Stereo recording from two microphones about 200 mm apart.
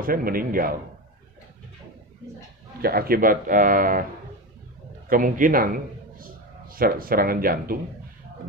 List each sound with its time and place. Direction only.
0.0 s speech: 45° right (ahead or behind)
2.8 s speech: 50° right (ahead or behind)
5.1 s a man's voice: 45° right (ahead or behind)